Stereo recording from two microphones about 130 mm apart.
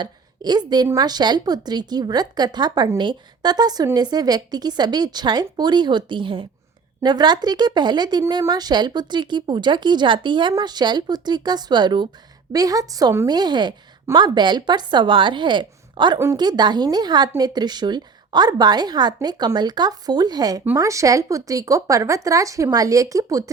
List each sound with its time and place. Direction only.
0.0 s a woman's voice: 35° right (ahead or behind)
16.1 s speech: 20° right (ahead or behind)
16.4 s a woman's voice: 35° right (ahead or behind)